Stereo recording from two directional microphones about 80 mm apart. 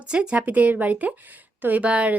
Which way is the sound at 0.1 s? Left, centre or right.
Centre.